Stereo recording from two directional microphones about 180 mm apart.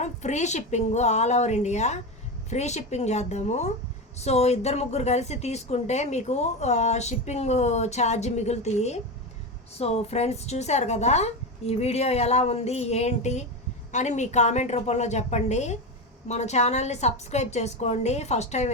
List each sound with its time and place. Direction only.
0.0 s a woman's voice: 40° left (ahead or behind)